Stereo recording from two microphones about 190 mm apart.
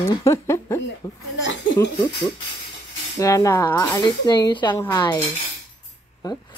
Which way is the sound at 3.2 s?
15° left (ahead or behind).